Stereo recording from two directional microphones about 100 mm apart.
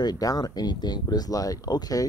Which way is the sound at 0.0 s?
40° left (ahead or behind).